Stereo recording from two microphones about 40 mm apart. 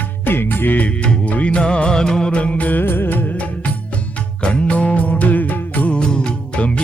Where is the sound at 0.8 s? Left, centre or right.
Left; by 2.3 s centre.